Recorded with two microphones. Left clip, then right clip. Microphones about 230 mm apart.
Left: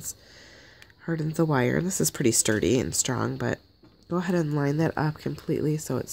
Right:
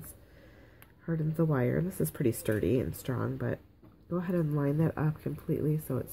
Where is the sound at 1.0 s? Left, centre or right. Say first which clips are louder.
Left 5 dB; left.